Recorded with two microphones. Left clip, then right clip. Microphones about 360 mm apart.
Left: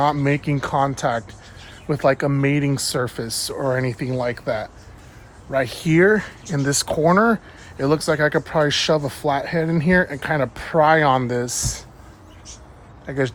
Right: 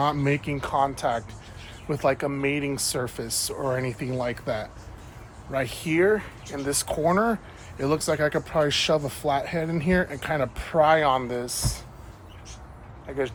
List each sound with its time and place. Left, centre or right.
0.0 s speech: left
13.1 s speech: left